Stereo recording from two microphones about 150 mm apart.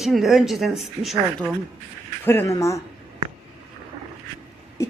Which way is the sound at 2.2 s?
15° left (ahead or behind).